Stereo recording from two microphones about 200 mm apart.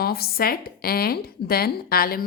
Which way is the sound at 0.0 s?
50° left (ahead or behind).